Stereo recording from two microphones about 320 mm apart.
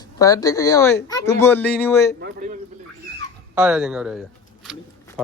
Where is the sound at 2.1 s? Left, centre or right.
Right.